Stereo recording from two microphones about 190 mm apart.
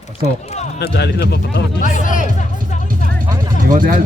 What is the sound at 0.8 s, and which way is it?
Speech, 65° left (ahead or behind).